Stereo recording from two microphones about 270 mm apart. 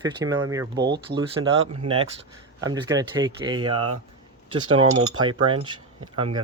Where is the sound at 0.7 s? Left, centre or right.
Right.